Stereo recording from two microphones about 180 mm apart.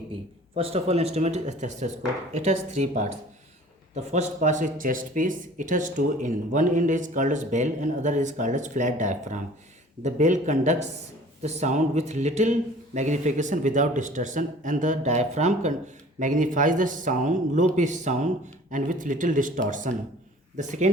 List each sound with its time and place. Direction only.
0.5 s speech: 35° right (ahead or behind)